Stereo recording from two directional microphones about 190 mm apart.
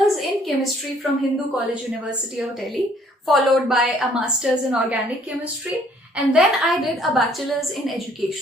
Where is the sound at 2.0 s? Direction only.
Centre (ahead or behind).